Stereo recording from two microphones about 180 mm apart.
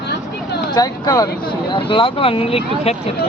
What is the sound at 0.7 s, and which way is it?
Speech, 20° left (ahead or behind).